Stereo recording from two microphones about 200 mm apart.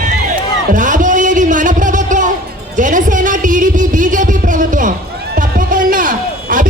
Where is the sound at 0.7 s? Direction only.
40° right (ahead or behind).